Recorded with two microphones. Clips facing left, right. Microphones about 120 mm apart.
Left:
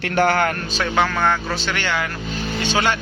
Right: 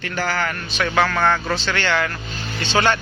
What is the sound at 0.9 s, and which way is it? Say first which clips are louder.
Speech: right 1 dB; 15° left (ahead or behind).